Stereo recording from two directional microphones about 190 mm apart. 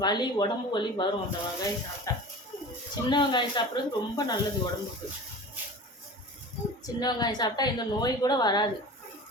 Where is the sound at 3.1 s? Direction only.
25° left (ahead or behind).